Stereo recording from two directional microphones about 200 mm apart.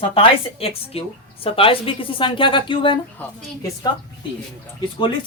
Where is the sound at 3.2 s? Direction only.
10° left (ahead or behind).